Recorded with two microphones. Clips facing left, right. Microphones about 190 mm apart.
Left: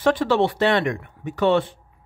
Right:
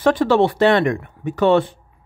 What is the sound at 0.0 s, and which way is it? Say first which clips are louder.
Speech: right 4 dB; 40° right (ahead or behind).